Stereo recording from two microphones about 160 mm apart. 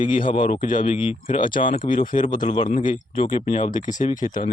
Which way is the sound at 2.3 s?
30° left (ahead or behind).